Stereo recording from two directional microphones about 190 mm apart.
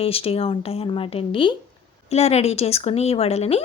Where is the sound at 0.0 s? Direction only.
30° left (ahead or behind).